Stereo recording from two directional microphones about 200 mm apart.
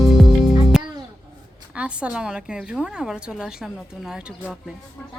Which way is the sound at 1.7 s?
5° right (ahead or behind).